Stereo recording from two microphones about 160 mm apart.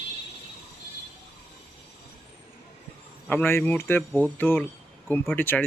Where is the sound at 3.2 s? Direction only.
10° left (ahead or behind).